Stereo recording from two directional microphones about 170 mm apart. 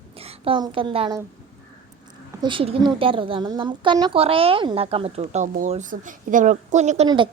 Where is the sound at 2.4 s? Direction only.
30° right (ahead or behind).